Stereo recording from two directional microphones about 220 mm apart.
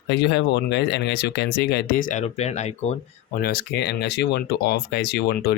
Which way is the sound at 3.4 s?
45° left (ahead or behind).